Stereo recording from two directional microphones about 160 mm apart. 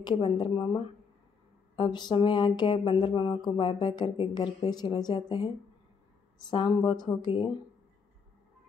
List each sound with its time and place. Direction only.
0.0 s speech: 30° left (ahead or behind)